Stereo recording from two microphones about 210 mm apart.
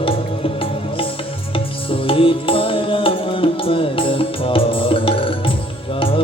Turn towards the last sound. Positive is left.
turn(degrees=25)  # may be behind; listen again after turning